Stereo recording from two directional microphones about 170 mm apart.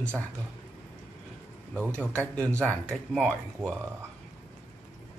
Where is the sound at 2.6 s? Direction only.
5° left (ahead or behind).